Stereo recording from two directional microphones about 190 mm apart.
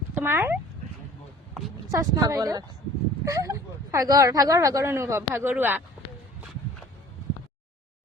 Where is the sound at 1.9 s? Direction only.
20° right (ahead or behind).